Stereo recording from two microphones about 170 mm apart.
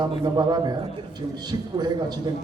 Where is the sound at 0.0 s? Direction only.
25° right (ahead or behind).